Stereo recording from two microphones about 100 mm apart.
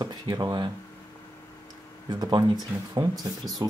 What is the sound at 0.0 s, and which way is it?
Speech, 45° right (ahead or behind).